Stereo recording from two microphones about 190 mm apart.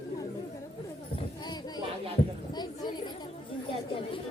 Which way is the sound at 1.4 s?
20° left (ahead or behind).